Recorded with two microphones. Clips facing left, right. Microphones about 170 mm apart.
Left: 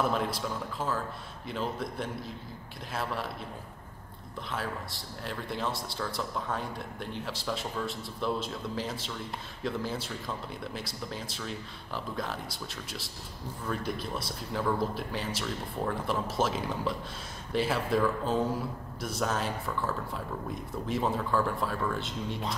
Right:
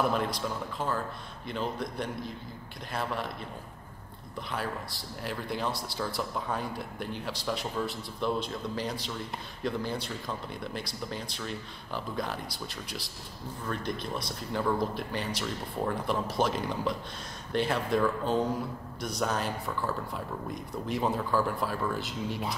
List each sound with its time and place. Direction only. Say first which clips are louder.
0.0 s speech: right 1 dB; centre (ahead or behind)
4.5 s speech: right 1 dB; centre (ahead or behind)